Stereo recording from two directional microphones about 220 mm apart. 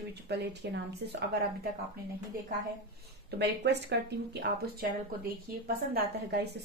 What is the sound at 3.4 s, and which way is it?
Speech, 50° right (ahead or behind).